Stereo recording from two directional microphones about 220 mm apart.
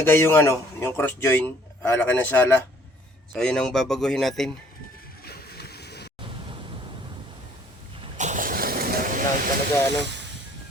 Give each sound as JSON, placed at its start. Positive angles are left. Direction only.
{"t": 0.0, "sound": "speech", "side_deg": 10}
{"t": 5.2, "sound": "a sound", "side_deg": 45}
{"t": 8.0, "sound": "vehicle", "side_deg": -35}